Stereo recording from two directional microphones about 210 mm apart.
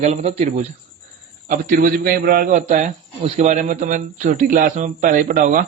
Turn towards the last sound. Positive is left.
turn(degrees=-40)  # may be behind; listen again after turning